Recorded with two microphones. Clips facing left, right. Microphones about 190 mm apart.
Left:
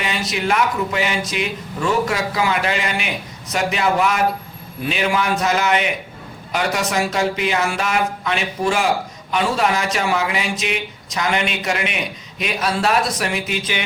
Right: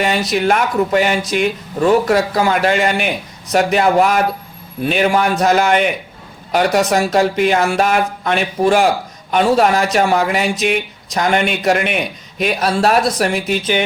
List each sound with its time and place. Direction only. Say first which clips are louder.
0.3 s a man's voice: right 3 dB; 50° right (ahead or behind)